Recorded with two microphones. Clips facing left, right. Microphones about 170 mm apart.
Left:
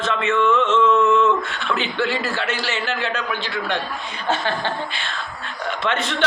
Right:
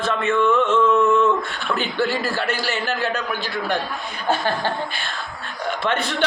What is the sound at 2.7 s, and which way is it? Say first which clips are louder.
Speech: right 1 dB; 40° right (ahead or behind).